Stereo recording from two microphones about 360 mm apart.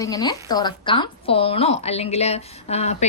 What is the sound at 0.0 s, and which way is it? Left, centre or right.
A woman's voice, centre.